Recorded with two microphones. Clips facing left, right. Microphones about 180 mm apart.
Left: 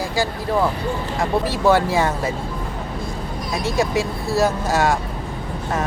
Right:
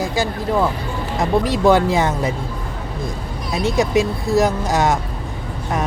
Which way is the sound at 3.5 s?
20° right (ahead or behind).